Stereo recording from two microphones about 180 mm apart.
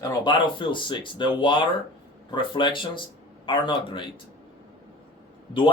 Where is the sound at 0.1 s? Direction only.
25° left (ahead or behind).